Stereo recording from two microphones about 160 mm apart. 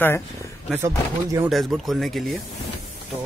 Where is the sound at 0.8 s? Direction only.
20° right (ahead or behind).